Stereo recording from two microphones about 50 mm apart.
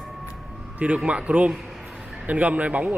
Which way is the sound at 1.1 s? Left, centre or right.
Right.